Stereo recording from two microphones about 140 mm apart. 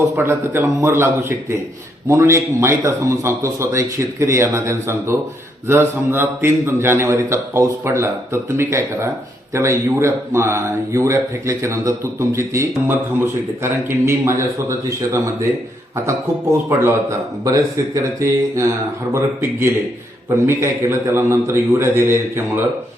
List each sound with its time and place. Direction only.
0.2 s a man's voice: 15° right (ahead or behind)